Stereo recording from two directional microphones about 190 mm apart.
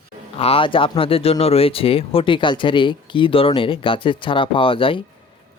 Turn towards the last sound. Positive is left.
turn(degrees=30)  # may be behind; listen again after turning